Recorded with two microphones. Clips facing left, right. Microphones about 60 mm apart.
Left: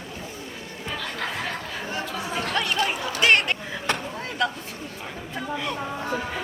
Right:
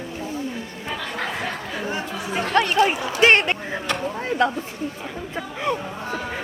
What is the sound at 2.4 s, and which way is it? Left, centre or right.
Chatter, right.